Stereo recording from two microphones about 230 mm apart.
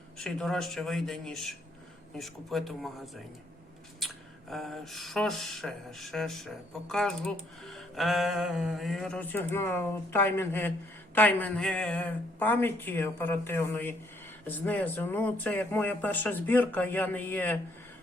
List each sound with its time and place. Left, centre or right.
0.2 s speech: centre
4.0 s speech: centre